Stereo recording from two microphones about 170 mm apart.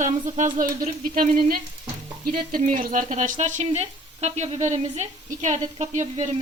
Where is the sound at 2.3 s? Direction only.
55° right (ahead or behind).